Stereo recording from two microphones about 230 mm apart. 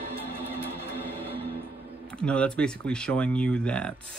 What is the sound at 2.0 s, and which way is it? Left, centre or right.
Speech, centre.